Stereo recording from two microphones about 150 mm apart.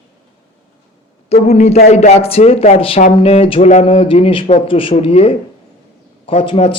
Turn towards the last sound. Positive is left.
turn(degrees=40)  # may be behind; listen again after turning